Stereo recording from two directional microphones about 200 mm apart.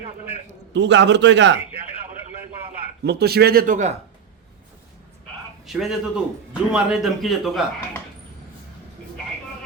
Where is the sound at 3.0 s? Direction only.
55° right (ahead or behind).